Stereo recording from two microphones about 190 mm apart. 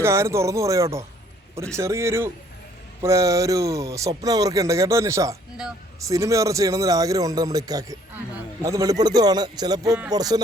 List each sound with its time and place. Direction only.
0.0 s a man's voice: 15° right (ahead or behind)